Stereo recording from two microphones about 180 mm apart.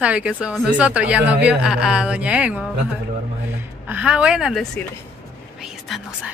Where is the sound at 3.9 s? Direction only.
5° right (ahead or behind).